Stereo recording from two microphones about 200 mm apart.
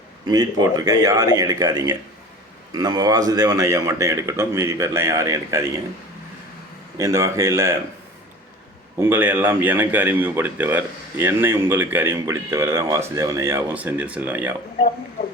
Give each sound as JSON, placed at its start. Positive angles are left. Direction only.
{"t": 0.3, "sound": "speech", "side_deg": -20}
{"t": 6.9, "sound": "speech", "side_deg": -15}
{"t": 9.0, "sound": "speech", "side_deg": -10}